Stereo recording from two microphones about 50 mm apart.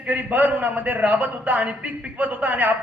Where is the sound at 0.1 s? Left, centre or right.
Right.